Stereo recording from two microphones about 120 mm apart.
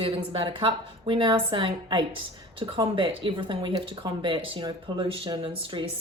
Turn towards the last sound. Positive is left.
turn(degrees=-45)  # may be behind; listen again after turning